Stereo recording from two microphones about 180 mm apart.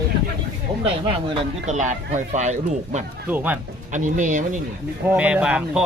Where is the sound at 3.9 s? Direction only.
45° right (ahead or behind).